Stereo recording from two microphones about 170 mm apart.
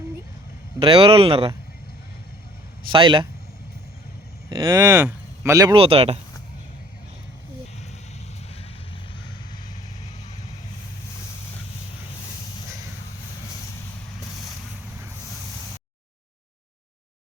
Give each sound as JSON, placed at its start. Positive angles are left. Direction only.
{"t": 0.8, "sound": "speech", "side_deg": -30}
{"t": 2.9, "sound": "speech", "side_deg": -30}
{"t": 4.5, "sound": "speech", "side_deg": -25}
{"t": 4.9, "sound": "speech", "side_deg": -10}
{"t": 5.7, "sound": "speech", "side_deg": -35}